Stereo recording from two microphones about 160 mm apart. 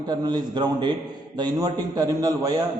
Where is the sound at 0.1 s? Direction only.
25° right (ahead or behind).